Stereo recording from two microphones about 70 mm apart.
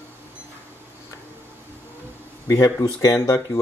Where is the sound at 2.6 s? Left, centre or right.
Left.